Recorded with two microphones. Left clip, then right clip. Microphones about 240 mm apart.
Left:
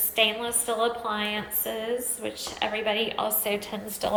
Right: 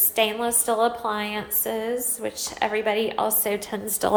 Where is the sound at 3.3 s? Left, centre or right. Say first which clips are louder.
Right 3 dB; right.